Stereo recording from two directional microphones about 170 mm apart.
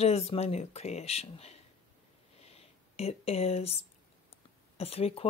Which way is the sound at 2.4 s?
35° left (ahead or behind).